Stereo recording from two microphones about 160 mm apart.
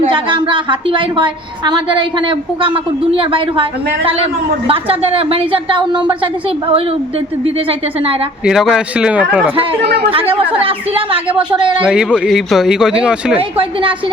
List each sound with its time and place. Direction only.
0.1 s a woman's voice: 30° right (ahead or behind)
8.4 s speech: 5° right (ahead or behind)
9.8 s speech: 90° right
10.1 s a woman's voice: 35° right (ahead or behind)
11.8 s speech: 5° right (ahead or behind)